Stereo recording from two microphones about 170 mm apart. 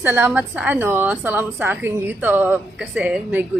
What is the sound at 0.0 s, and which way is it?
A woman's voice, 10° right (ahead or behind).